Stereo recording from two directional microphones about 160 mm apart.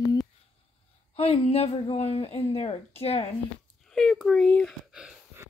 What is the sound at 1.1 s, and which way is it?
Speech, 40° left (ahead or behind).